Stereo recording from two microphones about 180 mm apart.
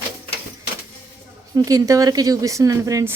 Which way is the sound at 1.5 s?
20° right (ahead or behind).